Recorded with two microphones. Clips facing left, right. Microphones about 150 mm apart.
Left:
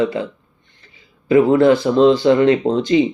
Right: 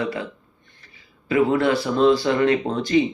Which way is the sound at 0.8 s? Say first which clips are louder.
Left 9 dB; 25° left (ahead or behind).